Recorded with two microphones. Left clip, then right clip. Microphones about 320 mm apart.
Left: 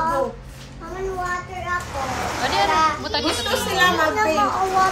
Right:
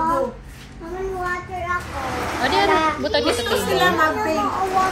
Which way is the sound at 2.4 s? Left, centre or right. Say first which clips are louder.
Right 1 dB; centre.